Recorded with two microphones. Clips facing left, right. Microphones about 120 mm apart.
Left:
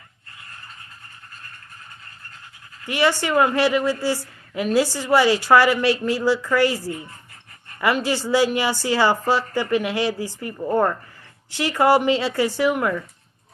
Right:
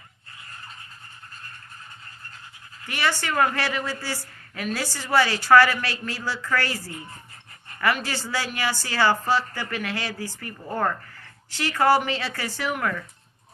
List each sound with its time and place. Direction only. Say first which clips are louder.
2.8 s a woman's voice: left 6 dB; 20° left (ahead or behind)